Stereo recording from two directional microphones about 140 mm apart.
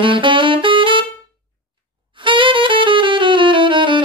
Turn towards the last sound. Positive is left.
turn(degrees=-35)  # may be behind; listen again after turning